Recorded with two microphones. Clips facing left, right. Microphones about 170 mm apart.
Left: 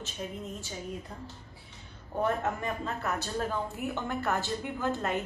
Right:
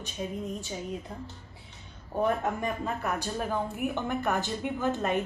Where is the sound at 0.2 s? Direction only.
15° right (ahead or behind).